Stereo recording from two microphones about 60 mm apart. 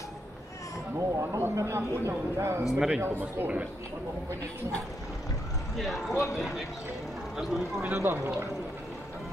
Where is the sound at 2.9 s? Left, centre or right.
Right.